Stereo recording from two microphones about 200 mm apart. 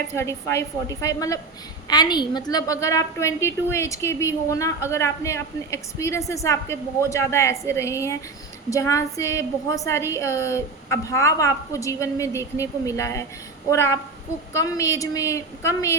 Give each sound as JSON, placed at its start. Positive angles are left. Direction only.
{"t": 0.2, "sound": "a woman's voice", "side_deg": 15}